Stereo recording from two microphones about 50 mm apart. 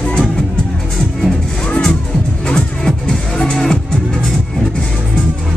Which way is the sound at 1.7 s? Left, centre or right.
Centre.